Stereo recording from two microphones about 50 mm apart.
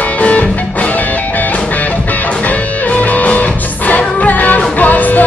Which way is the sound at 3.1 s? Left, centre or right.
Left.